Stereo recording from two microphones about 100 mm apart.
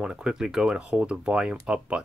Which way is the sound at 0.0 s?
10° right (ahead or behind).